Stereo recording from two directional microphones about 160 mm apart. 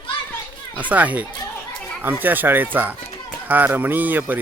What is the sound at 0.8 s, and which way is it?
Speech, 10° right (ahead or behind).